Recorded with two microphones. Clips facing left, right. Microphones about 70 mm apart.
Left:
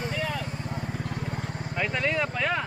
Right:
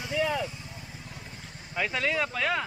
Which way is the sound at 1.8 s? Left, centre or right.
Centre.